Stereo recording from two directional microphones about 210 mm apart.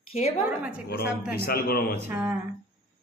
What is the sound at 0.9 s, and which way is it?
Speech, 50° left (ahead or behind).